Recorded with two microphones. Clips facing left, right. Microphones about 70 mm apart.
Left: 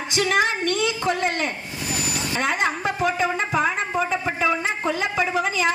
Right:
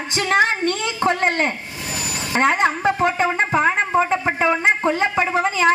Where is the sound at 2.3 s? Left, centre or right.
Right.